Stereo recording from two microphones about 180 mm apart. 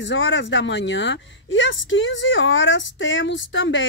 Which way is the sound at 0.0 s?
90° left.